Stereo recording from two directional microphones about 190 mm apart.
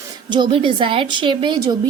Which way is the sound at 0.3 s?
25° right (ahead or behind).